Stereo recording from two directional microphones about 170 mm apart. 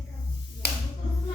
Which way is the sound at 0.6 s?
70° left (ahead or behind).